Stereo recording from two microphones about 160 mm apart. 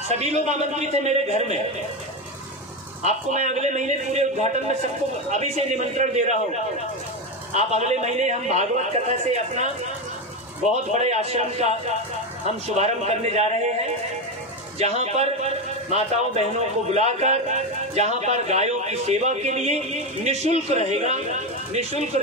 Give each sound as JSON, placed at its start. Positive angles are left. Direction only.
{"t": 0.1, "sound": "a man's voice", "side_deg": -45}
{"t": 3.0, "sound": "a man's voice", "side_deg": -45}
{"t": 10.9, "sound": "a man's voice", "side_deg": -45}
{"t": 14.8, "sound": "a man's voice", "side_deg": -40}